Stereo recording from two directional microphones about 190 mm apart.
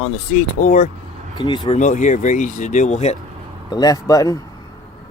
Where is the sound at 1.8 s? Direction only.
40° left (ahead or behind).